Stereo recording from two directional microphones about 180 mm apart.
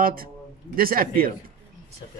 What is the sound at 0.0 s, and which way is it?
A man's voice, 55° right (ahead or behind).